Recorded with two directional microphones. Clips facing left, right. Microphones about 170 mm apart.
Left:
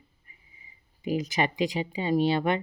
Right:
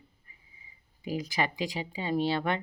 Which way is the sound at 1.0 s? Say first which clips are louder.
Left 4 dB; 20° left (ahead or behind).